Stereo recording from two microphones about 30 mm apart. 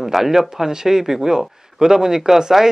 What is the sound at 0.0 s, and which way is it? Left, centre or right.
Speech, centre.